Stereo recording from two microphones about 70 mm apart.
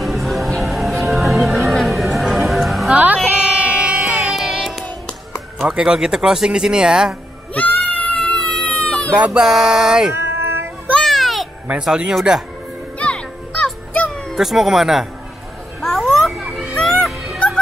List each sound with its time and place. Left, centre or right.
0.0 s music: centre
2.9 s music: right; by 4.8 s centre
5.7 s speech: centre
7.5 s a sound: left
9.1 s speech: centre
10.1 s cat: right
11.1 s a sound: centre
11.8 s speech: centre
13.0 s music: centre
14.3 s speech: centre
15.8 s children playing: centre
16.7 s music: centre